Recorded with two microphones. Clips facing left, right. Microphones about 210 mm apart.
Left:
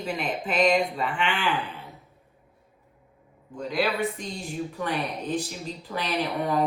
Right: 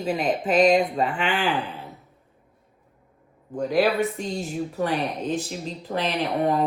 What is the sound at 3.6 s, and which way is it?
A woman's voice, 45° right (ahead or behind).